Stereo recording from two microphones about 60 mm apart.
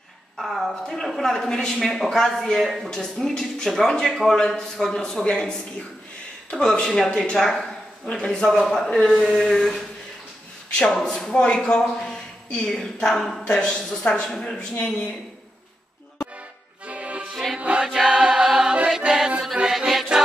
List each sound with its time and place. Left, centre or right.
0.4 s a woman's voice: centre
9.2 s a woman's voice: centre
9.5 s a woman's voice: centre
12.0 s a man's voice: centre
16.8 s accordion: right
17.3 s music: centre
17.6 s music: centre